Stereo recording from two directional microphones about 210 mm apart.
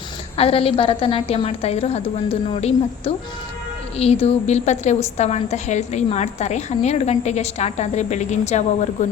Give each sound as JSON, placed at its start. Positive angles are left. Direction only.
{"t": 0.3, "sound": "a woman's voice", "side_deg": 30}